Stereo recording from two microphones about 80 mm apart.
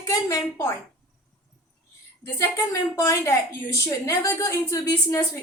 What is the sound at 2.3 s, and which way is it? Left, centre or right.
A woman's voice, left.